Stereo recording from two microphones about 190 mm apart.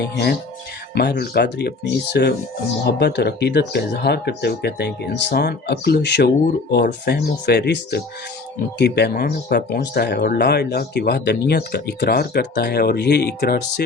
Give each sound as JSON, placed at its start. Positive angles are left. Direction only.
{"t": 0.0, "sound": "speech", "side_deg": 55}